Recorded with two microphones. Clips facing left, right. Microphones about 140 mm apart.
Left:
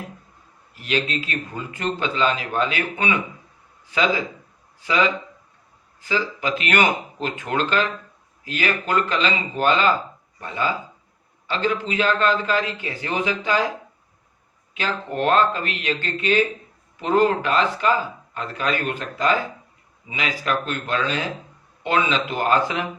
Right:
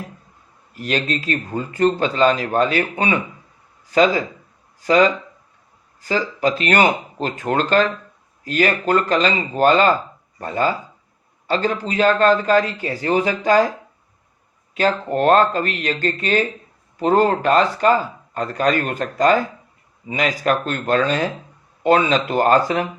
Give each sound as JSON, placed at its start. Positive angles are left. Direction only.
{"t": 0.8, "sound": "speech", "side_deg": -40}
{"t": 14.7, "sound": "speech", "side_deg": -40}